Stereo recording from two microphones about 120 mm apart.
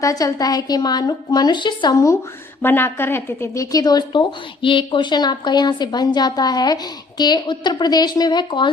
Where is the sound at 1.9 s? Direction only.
25° left (ahead or behind).